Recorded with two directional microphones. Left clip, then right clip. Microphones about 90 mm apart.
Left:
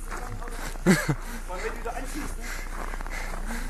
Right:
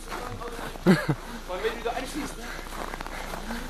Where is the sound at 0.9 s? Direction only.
25° left (ahead or behind).